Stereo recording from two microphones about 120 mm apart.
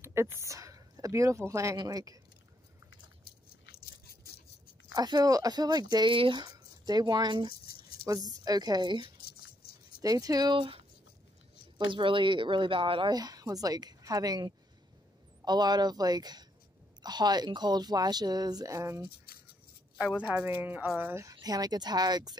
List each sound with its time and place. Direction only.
0.0 s a woman's voice: 20° right (ahead or behind)
4.9 s a woman's voice: 35° right (ahead or behind)
6.4 s a woman's voice: 35° right (ahead or behind)
11.9 s speech: 45° right (ahead or behind)
13.1 s a woman's voice: 30° right (ahead or behind)
20.0 s speech: 10° right (ahead or behind)
21.3 s a woman's voice: 30° right (ahead or behind)